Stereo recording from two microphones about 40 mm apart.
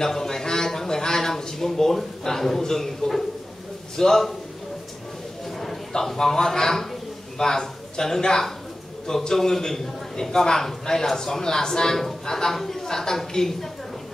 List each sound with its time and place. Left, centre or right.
0.0 s a sound: centre
3.9 s a man's voice: centre
5.9 s a man's voice: centre